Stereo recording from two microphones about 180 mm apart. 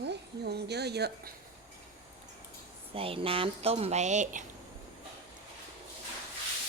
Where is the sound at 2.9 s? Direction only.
30° right (ahead or behind).